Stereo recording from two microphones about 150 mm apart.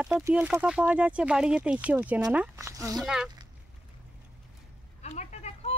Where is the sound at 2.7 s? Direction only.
20° right (ahead or behind).